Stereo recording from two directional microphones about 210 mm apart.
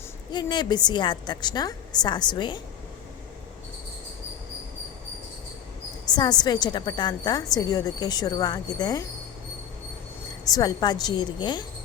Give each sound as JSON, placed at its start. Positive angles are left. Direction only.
{"t": 0.3, "sound": "a woman's voice", "side_deg": 20}
{"t": 6.1, "sound": "a woman's voice", "side_deg": 20}
{"t": 10.4, "sound": "a woman's voice", "side_deg": 20}